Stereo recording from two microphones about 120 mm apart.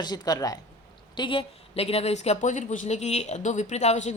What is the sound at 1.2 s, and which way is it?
Speech, 45° left (ahead or behind).